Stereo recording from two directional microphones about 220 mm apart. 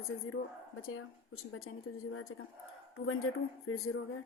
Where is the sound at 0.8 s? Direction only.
70° left (ahead or behind).